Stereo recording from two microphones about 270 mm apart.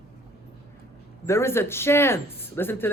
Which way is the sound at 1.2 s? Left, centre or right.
Centre.